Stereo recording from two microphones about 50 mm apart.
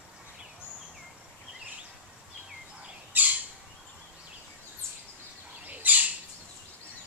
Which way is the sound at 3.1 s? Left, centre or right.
Right.